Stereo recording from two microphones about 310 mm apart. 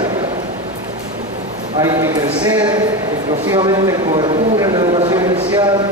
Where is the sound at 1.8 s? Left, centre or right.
Centre.